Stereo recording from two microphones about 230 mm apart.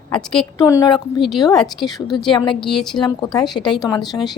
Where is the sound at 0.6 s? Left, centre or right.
Centre.